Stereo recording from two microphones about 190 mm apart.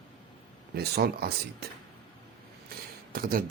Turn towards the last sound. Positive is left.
turn(degrees=-50)  # may be behind; listen again after turning